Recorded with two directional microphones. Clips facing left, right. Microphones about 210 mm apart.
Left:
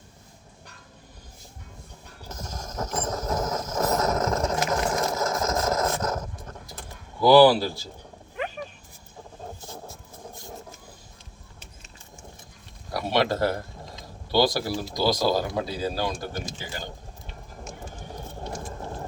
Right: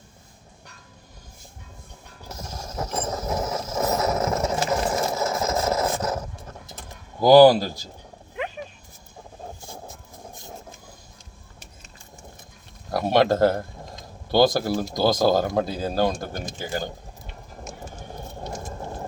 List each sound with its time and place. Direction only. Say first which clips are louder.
2.3 s mechanisms: right 1 dB; 10° right (ahead or behind)
4.7 s sewing machine: right 2 dB; 10° right (ahead or behind)
7.2 s speech: right 3 dB; 45° right (ahead or behind)
9.6 s vehicle: even; 15° right (ahead or behind)
12.9 s speech: right 5 dB; 50° right (ahead or behind)